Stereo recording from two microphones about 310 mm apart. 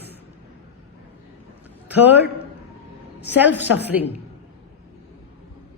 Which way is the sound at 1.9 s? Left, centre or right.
Centre.